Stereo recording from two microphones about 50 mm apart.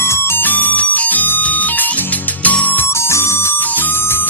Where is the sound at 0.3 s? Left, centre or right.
Left.